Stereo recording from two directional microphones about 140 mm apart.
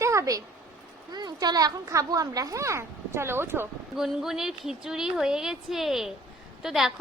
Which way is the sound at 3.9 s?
5° right (ahead or behind).